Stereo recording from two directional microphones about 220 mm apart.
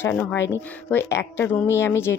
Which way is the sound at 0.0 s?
10° left (ahead or behind).